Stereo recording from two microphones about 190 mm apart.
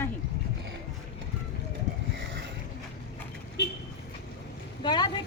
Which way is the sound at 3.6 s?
60° left (ahead or behind).